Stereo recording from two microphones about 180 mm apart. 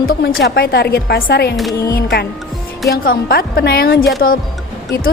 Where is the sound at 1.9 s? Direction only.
60° left (ahead or behind).